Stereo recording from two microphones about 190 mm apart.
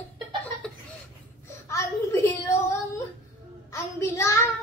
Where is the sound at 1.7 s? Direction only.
15° left (ahead or behind).